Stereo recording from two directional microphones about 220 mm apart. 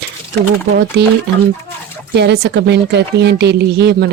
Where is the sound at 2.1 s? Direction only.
50° right (ahead or behind).